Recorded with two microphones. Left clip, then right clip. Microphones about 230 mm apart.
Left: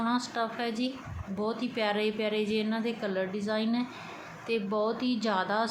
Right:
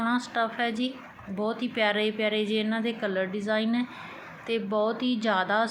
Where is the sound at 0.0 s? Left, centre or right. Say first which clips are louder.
Right 3 dB; centre.